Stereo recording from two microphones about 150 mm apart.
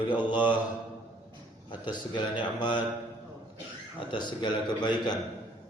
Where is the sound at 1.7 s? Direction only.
30° left (ahead or behind).